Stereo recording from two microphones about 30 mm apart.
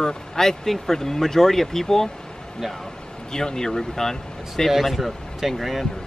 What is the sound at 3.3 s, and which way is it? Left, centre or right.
Speech, centre.